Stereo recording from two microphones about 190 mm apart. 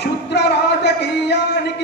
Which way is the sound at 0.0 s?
65° left (ahead or behind).